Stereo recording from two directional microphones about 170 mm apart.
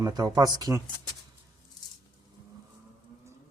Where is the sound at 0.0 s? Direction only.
20° right (ahead or behind).